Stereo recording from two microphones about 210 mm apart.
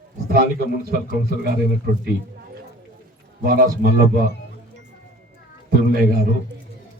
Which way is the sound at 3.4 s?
45° right (ahead or behind).